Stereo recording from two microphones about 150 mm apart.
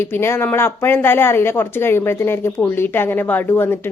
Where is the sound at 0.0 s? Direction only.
15° left (ahead or behind).